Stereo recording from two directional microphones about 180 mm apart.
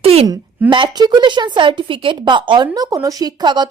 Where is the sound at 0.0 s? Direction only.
35° right (ahead or behind).